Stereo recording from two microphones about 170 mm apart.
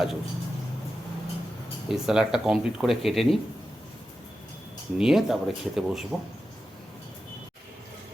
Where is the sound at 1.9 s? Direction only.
5° right (ahead or behind).